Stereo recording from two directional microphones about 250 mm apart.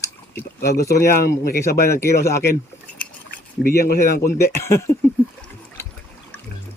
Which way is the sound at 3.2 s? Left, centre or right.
Left.